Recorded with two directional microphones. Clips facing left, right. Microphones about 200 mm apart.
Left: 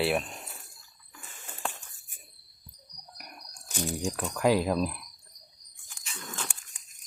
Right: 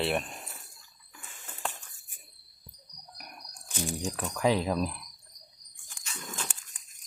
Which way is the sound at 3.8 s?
Centre (ahead or behind).